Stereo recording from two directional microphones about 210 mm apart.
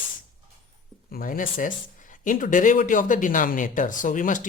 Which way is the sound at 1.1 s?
45° left (ahead or behind).